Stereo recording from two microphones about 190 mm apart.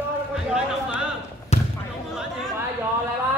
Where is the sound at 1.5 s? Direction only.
35° left (ahead or behind).